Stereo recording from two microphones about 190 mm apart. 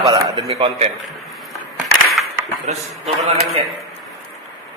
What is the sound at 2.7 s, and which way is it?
Speech, 40° right (ahead or behind).